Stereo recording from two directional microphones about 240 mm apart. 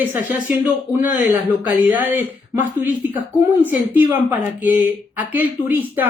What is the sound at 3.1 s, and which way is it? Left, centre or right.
Speech, centre.